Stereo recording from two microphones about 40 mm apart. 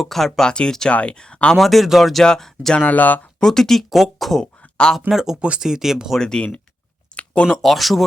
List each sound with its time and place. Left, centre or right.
0.0 s speech: centre
0.4 s speech: left
1.5 s speech: centre
2.2 s speech: centre
2.8 s speech: left
3.4 s speech: centre
4.9 s speech: centre
6.1 s speech: centre
7.1 s a sound: left
7.4 s speech: centre